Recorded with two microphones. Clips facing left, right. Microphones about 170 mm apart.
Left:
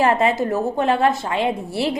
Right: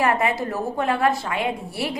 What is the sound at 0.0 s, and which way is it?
A woman's voice, 25° left (ahead or behind).